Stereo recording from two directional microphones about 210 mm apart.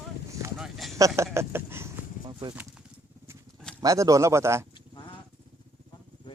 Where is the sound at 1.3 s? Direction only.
10° right (ahead or behind).